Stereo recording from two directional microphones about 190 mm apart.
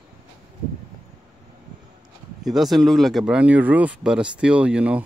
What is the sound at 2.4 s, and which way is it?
Speech, centre (ahead or behind).